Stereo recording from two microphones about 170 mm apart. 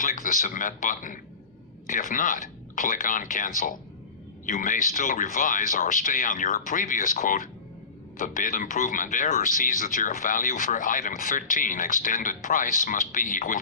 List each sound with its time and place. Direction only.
0.0 s speech: 50° left (ahead or behind)